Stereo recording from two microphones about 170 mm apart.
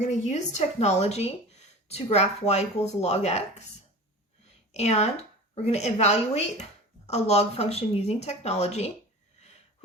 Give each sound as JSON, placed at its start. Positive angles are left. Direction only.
{"t": 0.0, "sound": "speech", "side_deg": 45}
{"t": 4.7, "sound": "speech", "side_deg": 40}